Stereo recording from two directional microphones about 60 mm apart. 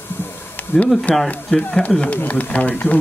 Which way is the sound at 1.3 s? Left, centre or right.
Centre.